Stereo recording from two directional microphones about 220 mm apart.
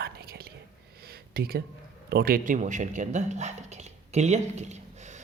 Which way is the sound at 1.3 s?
45° right (ahead or behind).